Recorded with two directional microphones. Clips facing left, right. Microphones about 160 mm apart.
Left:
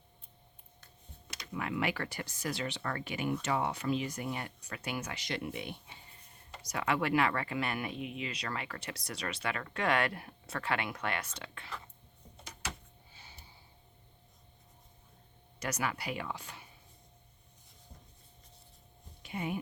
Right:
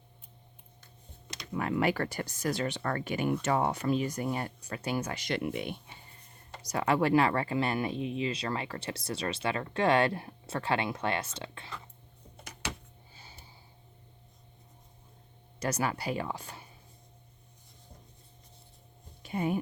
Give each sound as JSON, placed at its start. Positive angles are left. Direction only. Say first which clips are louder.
{"t": 1.5, "sound": "speech", "louder": "right 6 dB", "side_deg": -40}
{"t": 5.1, "sound": "speech", "louder": "right 6 dB", "side_deg": -55}
{"t": 6.6, "sound": "speech", "louder": "right 5 dB", "side_deg": -35}
{"t": 15.6, "sound": "speech", "louder": "right 5 dB", "side_deg": -35}
{"t": 19.2, "sound": "speech", "louder": "right 6 dB", "side_deg": -40}